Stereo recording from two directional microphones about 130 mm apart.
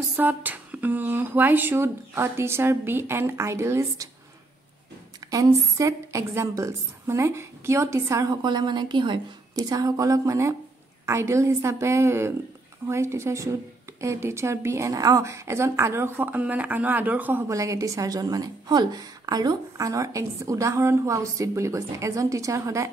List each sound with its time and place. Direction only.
0.1 s speech: 15° right (ahead or behind)
5.3 s a woman's voice: 25° right (ahead or behind)